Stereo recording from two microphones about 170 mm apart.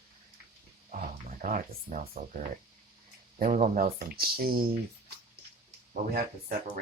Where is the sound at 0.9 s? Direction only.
55° right (ahead or behind).